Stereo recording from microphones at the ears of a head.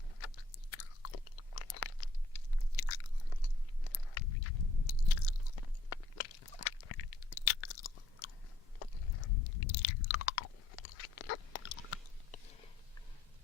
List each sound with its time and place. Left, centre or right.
0.2 s chewing: left